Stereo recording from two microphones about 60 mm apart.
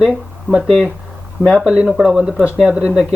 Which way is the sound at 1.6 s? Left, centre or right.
Centre.